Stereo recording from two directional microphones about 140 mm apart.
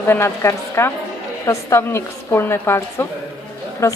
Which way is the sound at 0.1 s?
20° left (ahead or behind).